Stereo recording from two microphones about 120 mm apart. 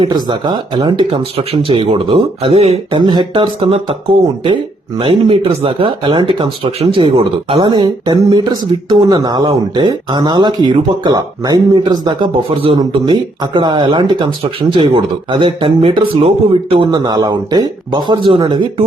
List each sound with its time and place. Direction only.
0.2 s speech: 35° right (ahead or behind)
1.4 s speech: 50° right (ahead or behind)
3.0 s speech: 35° right (ahead or behind)
7.7 s speech: 35° right (ahead or behind)
12.5 s speech: 50° right (ahead or behind)
12.8 s speech: 35° right (ahead or behind)
16.9 s speech: 30° right (ahead or behind)